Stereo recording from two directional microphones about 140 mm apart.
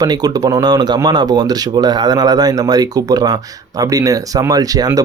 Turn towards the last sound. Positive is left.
turn(degrees=-25)  # may be behind; listen again after turning